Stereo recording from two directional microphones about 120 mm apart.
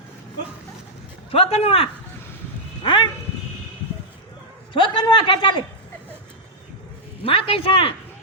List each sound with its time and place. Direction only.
1.3 s a man's voice: 55° left (ahead or behind)
2.8 s a man's voice: 45° left (ahead or behind)
4.7 s a man's voice: 45° left (ahead or behind)
7.3 s a man's voice: 50° left (ahead or behind)